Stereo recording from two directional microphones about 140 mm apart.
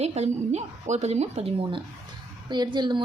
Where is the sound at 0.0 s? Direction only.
50° right (ahead or behind).